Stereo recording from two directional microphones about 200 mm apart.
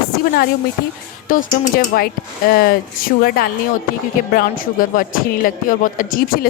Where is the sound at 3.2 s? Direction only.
50° left (ahead or behind).